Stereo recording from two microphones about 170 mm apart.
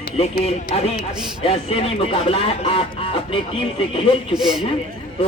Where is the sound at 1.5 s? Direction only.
35° left (ahead or behind).